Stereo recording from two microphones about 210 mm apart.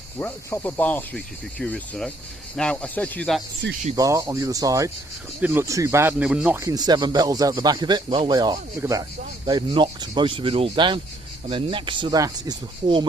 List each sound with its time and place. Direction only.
0.2 s speech: 10° left (ahead or behind)
3.9 s speech: 15° right (ahead or behind)